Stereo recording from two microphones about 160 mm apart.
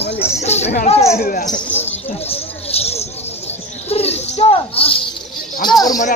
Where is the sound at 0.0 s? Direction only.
40° left (ahead or behind).